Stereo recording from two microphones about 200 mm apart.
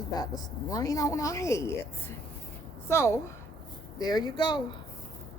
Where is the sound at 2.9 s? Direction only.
15° left (ahead or behind).